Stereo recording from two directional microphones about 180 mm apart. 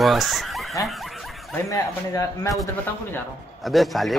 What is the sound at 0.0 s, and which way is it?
Speech, centre (ahead or behind).